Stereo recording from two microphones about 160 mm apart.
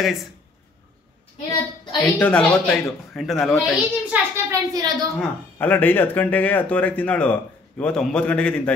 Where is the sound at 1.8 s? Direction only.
5° left (ahead or behind).